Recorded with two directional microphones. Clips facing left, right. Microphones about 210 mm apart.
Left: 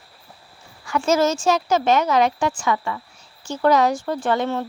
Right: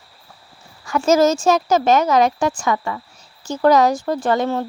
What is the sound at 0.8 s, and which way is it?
A woman's voice, 45° right (ahead or behind).